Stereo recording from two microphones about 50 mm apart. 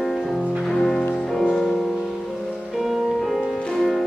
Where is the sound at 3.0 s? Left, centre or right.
Centre.